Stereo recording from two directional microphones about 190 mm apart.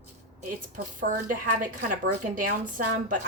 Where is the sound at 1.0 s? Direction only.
45° right (ahead or behind).